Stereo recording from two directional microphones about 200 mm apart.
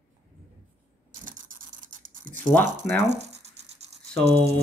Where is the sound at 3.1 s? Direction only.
30° right (ahead or behind).